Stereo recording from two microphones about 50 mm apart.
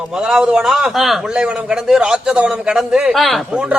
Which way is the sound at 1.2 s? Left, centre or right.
Centre.